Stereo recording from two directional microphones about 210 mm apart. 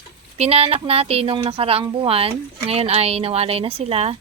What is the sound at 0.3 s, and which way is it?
A woman's voice, 30° right (ahead or behind).